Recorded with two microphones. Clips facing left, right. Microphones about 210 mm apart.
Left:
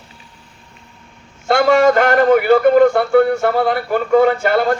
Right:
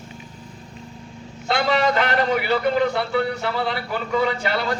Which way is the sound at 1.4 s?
50° left (ahead or behind).